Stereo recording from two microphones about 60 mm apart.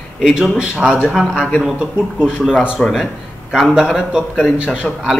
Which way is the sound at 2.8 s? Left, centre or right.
Centre.